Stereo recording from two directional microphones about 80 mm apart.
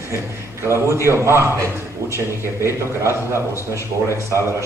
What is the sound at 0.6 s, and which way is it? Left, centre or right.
A man's voice, right.